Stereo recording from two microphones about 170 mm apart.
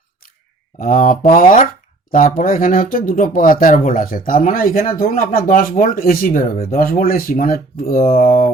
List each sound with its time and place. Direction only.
0.8 s speech: 55° left (ahead or behind)